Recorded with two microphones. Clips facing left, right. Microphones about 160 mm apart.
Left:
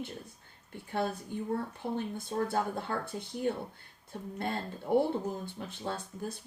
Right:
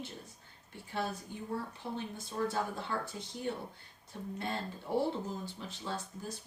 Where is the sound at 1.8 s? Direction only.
60° left (ahead or behind).